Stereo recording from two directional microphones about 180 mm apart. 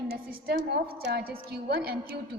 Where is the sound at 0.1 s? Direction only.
55° right (ahead or behind).